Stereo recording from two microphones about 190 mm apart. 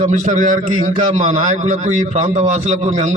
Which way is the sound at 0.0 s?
40° right (ahead or behind).